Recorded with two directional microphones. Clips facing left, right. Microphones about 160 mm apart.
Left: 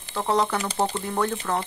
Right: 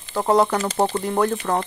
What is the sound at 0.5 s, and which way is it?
Speech, 35° right (ahead or behind).